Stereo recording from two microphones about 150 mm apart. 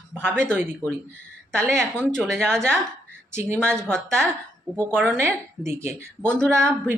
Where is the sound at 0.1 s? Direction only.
15° right (ahead or behind).